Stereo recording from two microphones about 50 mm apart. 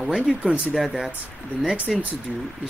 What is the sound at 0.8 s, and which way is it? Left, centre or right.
Speech, centre.